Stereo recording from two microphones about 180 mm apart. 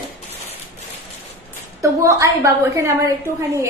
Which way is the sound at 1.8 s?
15° right (ahead or behind).